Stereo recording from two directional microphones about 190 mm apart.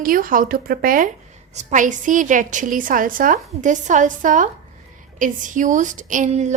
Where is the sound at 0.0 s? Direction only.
50° right (ahead or behind).